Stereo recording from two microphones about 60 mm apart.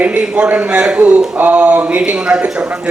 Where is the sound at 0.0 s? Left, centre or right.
Right.